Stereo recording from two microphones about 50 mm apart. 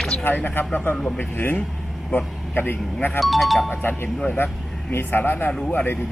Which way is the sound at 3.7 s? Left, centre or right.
Left.